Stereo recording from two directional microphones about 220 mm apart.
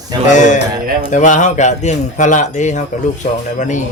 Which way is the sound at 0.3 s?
35° left (ahead or behind).